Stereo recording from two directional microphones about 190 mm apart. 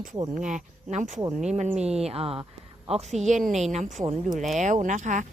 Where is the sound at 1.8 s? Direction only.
35° right (ahead or behind).